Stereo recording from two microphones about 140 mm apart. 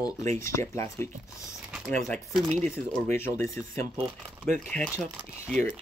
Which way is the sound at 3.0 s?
15° left (ahead or behind).